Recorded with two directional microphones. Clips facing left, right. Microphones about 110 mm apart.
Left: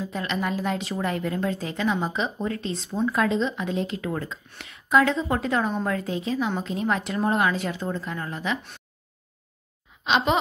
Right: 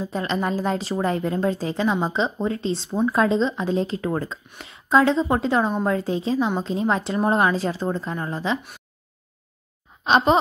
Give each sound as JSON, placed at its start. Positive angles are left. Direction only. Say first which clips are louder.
{"t": 0.0, "sound": "a woman's voice", "louder": "right 3 dB", "side_deg": -30}
{"t": 10.0, "sound": "a woman's voice", "louder": "right 5 dB", "side_deg": -35}